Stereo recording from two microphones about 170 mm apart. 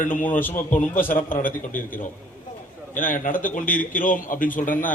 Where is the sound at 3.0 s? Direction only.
55° left (ahead or behind).